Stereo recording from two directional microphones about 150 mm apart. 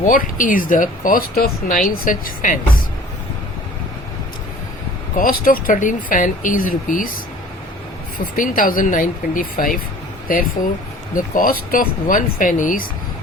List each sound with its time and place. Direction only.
0.0 s speech: 65° left (ahead or behind)
5.1 s speech: 70° left (ahead or behind)
8.2 s speech: 65° left (ahead or behind)